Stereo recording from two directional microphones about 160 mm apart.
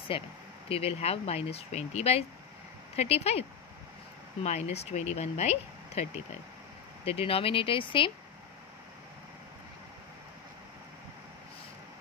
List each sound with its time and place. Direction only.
0.1 s speech: 35° left (ahead or behind)
7.1 s speech: 35° left (ahead or behind)